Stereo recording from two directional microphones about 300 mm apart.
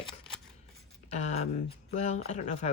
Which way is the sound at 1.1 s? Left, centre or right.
Left.